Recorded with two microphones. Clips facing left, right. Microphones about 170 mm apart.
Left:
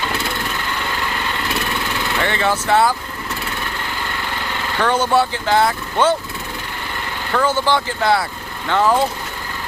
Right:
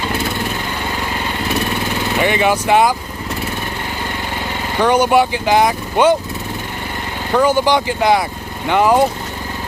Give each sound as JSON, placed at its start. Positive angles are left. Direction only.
{"t": 2.1, "sound": "speech", "side_deg": -15}
{"t": 4.8, "sound": "speech", "side_deg": -15}
{"t": 7.3, "sound": "speech", "side_deg": -15}